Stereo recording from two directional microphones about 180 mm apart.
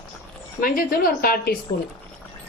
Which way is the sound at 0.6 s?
55° left (ahead or behind).